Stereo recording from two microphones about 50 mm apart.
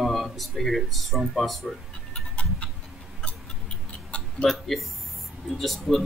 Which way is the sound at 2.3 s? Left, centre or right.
Left.